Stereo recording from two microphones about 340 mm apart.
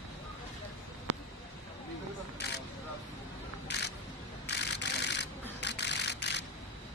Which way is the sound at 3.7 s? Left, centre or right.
Left.